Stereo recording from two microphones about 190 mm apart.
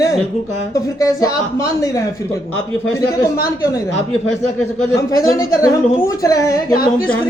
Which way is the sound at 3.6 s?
15° left (ahead or behind).